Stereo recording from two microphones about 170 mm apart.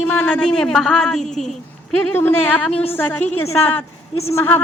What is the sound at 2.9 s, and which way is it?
Speech, 10° left (ahead or behind).